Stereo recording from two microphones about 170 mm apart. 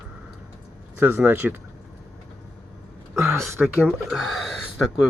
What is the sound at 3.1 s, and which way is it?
Speech, 15° right (ahead or behind).